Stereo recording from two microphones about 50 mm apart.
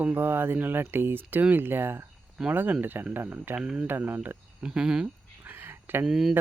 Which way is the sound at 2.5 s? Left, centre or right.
Right.